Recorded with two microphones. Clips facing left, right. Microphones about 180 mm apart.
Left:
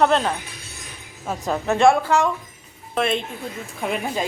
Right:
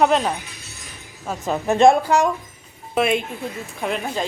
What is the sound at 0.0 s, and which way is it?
Speech, 5° right (ahead or behind).